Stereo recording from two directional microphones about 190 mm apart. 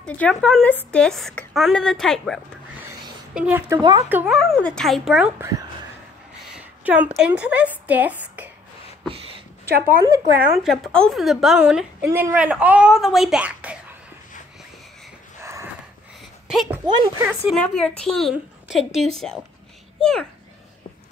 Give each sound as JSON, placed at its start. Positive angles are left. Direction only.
{"t": 0.0, "sound": "a woman's voice", "side_deg": 5}
{"t": 3.3, "sound": "a woman's voice", "side_deg": -10}
{"t": 4.4, "sound": "a woman's voice", "side_deg": 5}
{"t": 6.8, "sound": "a woman's voice", "side_deg": -10}
{"t": 9.8, "sound": "a woman's voice", "side_deg": -20}
{"t": 10.4, "sound": "a woman's voice", "side_deg": 0}
{"t": 16.4, "sound": "speech", "side_deg": 0}
{"t": 16.8, "sound": "a woman's voice", "side_deg": -20}
{"t": 17.6, "sound": "a woman's voice", "side_deg": 5}